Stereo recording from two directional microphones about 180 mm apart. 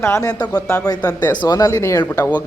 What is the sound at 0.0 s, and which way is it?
Speech, 15° left (ahead or behind).